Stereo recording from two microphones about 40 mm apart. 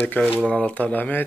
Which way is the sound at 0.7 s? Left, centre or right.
Left.